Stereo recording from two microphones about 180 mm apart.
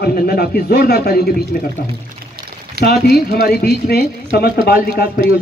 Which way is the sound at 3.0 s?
60° left (ahead or behind).